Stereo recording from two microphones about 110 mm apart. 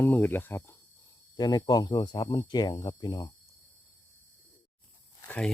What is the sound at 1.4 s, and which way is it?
Speech, 40° left (ahead or behind).